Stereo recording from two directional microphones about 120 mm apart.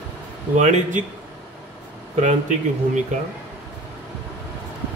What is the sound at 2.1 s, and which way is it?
Speech, 90° right.